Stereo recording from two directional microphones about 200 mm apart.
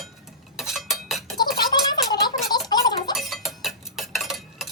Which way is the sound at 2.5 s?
20° left (ahead or behind).